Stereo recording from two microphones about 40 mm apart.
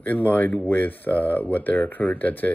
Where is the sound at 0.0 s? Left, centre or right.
Left.